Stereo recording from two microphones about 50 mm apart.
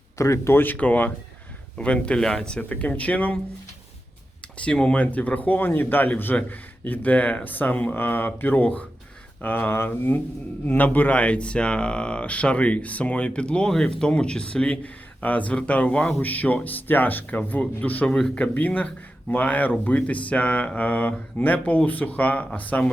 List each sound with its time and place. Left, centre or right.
0.2 s speech: left
0.5 s speech: left
2.1 s speech: centre
2.6 s speech: left
4.5 s speech: left
5.1 s speech: left
7.9 s speech: left
10.7 s speech: left
13.7 s speech: centre
18.5 s speech: left